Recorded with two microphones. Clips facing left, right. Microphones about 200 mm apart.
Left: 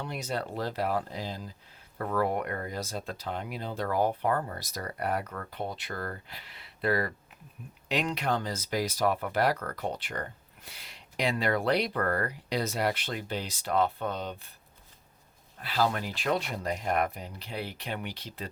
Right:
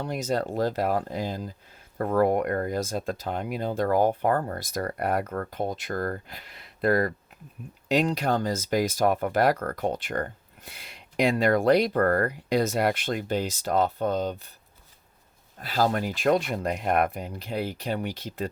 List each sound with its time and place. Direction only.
0.0 s speech: 45° right (ahead or behind)
15.5 s speech: 45° right (ahead or behind)